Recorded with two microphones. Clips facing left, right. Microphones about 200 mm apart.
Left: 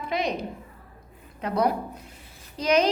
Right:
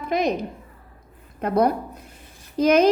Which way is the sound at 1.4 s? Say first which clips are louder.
Right 4 dB; 50° right (ahead or behind).